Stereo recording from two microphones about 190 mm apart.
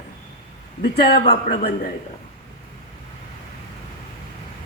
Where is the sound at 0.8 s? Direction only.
60° left (ahead or behind).